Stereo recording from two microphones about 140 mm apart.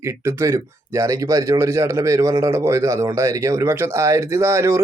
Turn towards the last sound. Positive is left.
turn(degrees=-20)  # may be behind; listen again after turning